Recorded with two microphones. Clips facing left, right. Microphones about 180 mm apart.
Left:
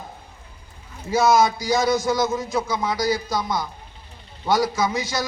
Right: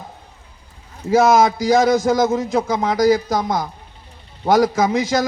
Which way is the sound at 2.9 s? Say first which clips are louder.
Right 9 dB; 50° right (ahead or behind).